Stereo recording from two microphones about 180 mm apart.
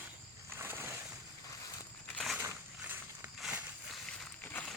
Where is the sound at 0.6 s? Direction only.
10° right (ahead or behind).